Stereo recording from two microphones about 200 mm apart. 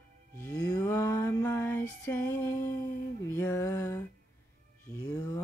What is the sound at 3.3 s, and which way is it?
Music, 10° left (ahead or behind).